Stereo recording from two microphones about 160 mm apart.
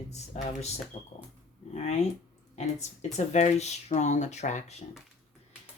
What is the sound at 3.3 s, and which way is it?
Speech, 45° left (ahead or behind).